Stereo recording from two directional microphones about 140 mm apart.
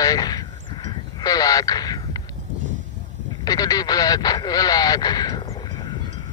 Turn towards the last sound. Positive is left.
turn(degrees=30)  # may be behind; listen again after turning